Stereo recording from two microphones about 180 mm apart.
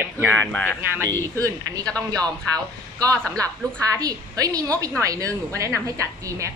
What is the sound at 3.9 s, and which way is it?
A woman's voice, 20° right (ahead or behind).